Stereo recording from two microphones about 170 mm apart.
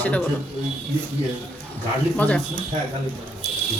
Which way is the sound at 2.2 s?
10° left (ahead or behind).